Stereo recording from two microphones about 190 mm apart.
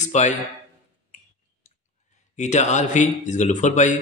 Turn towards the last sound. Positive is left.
turn(degrees=40)  # may be behind; listen again after turning